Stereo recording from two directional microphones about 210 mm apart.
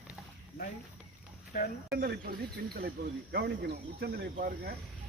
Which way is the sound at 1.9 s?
50° right (ahead or behind).